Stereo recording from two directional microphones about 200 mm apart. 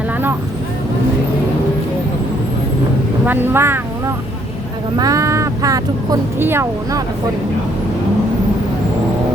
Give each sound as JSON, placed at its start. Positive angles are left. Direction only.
{"t": 3.2, "sound": "speech", "side_deg": -10}